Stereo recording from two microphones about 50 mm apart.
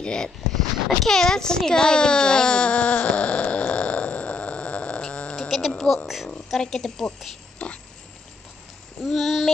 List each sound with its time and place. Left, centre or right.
0.0 s a sound: centre
1.0 s speech: centre
1.7 s a sound: centre
5.0 s cat: centre
5.7 s music: centre
6.0 s child singing: centre
6.5 s speech: centre
7.5 s pig: left
9.0 s child singing: centre